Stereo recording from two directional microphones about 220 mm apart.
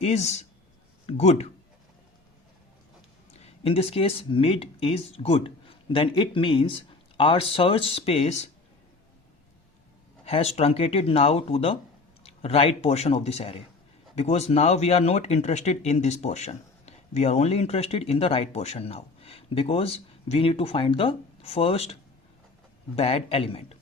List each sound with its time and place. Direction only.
0.0 s speech: 30° left (ahead or behind)
3.3 s speech: 30° left (ahead or behind)
10.2 s speech: 25° left (ahead or behind)
23.0 s speech: 25° left (ahead or behind)